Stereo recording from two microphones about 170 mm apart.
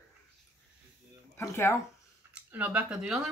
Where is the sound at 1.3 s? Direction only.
15° left (ahead or behind).